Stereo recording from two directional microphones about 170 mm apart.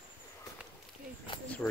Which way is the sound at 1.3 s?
30° left (ahead or behind).